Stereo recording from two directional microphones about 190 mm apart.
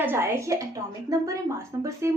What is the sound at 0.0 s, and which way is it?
A woman's voice, 10° right (ahead or behind).